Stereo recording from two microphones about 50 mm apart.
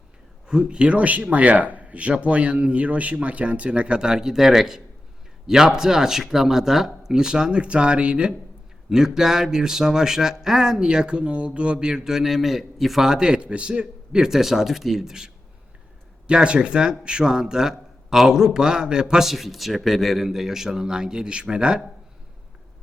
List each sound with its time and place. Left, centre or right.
0.4 s speech: centre
14.3 s speech: centre